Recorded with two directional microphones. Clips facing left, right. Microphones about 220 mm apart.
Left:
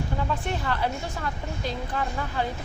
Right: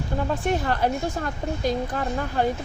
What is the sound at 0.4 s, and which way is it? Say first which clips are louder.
A woman's voice: right 5 dB; 45° right (ahead or behind).